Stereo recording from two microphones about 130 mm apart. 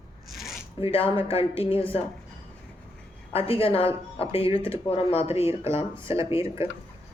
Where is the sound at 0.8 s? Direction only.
45° left (ahead or behind).